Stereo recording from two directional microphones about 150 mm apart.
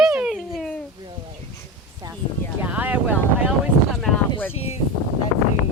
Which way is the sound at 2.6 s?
10° right (ahead or behind).